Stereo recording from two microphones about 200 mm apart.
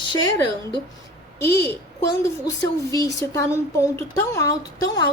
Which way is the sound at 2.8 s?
15° left (ahead or behind).